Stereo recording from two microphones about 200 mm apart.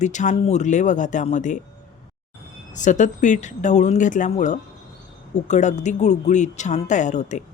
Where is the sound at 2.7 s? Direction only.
40° left (ahead or behind).